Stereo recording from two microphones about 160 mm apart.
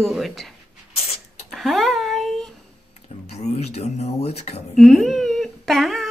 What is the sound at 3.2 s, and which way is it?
Speech, 45° left (ahead or behind).